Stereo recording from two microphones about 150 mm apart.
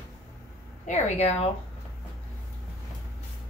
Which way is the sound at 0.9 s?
45° left (ahead or behind).